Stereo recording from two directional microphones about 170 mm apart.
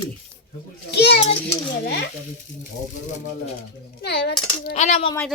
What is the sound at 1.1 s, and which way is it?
Speech, 35° left (ahead or behind).